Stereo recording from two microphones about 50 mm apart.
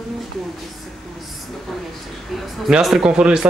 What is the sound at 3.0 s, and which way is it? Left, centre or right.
Speech, centre.